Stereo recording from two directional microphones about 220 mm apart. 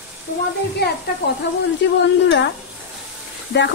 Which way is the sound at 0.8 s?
50° left (ahead or behind).